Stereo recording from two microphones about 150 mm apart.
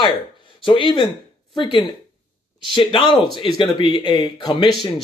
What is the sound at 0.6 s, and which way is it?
Speech, 35° left (ahead or behind).